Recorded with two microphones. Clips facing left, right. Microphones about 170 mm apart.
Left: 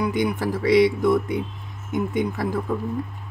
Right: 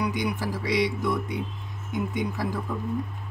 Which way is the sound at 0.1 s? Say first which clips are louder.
Left 5 dB; 55° left (ahead or behind).